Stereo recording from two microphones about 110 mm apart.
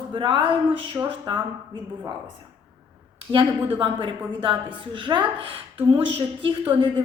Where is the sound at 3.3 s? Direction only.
55° right (ahead or behind).